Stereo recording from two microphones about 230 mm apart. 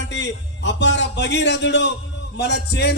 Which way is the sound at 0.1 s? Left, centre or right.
Left.